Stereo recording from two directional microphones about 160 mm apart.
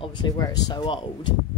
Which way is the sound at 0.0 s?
25° left (ahead or behind).